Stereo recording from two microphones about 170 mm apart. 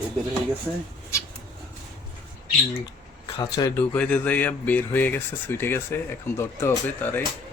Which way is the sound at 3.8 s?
5° left (ahead or behind).